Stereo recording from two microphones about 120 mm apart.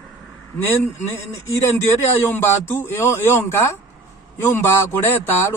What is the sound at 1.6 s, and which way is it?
Speech, 20° left (ahead or behind).